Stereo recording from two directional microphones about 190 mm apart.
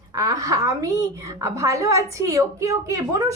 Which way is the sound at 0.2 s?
20° right (ahead or behind).